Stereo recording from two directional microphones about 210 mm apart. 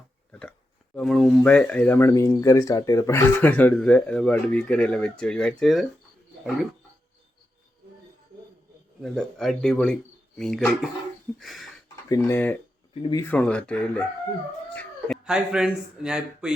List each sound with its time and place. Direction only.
0.3 s oink: 5° left (ahead or behind)
0.9 s speech: centre (ahead or behind)
9.0 s speech: centre (ahead or behind)
12.0 s speech: 15° left (ahead or behind)
12.9 s speech: 25° left (ahead or behind)
13.2 s speech: 5° left (ahead or behind)
14.7 s a sound: 5° left (ahead or behind)
15.2 s speech: 5° right (ahead or behind)